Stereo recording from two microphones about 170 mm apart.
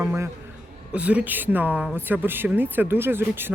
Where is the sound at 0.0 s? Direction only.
10° right (ahead or behind).